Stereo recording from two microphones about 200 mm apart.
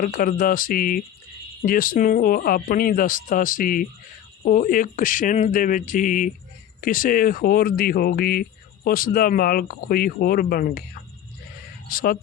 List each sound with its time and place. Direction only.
0.0 s speech: 45° left (ahead or behind)
11.9 s speech: 45° left (ahead or behind)